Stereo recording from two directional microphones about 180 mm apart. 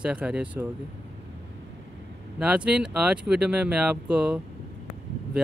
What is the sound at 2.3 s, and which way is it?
Speech, 5° right (ahead or behind).